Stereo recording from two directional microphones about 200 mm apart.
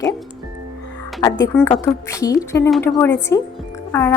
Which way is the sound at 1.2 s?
15° left (ahead or behind).